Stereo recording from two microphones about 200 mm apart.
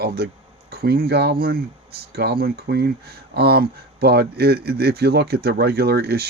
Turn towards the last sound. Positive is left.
turn(degrees=-50)  # may be behind; listen again after turning